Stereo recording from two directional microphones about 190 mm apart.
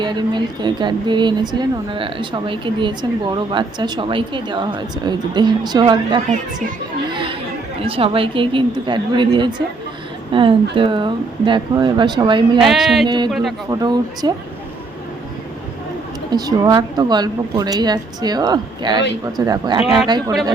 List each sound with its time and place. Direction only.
0.0 s speech: 25° right (ahead or behind)
7.1 s a sound: 25° right (ahead or behind)
7.8 s speech: 30° right (ahead or behind)
12.5 s speech: centre (ahead or behind)
13.1 s speech: 25° right (ahead or behind)
16.3 s speech: 20° right (ahead or behind)
19.8 s speech: centre (ahead or behind)
20.1 s speech: 20° right (ahead or behind)